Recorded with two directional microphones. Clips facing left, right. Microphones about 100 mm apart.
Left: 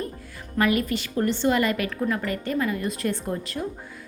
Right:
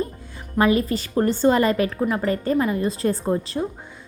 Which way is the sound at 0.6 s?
30° right (ahead or behind).